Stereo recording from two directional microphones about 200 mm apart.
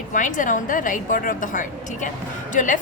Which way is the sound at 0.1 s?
40° left (ahead or behind).